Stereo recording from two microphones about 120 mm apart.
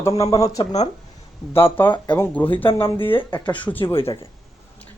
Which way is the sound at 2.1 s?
20° left (ahead or behind).